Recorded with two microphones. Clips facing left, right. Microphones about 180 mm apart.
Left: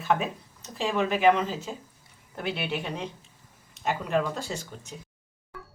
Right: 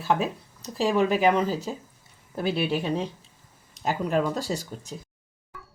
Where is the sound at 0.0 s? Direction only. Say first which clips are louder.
Right 2 dB; 35° right (ahead or behind).